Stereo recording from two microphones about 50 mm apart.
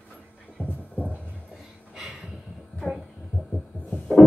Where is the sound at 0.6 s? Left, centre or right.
Left.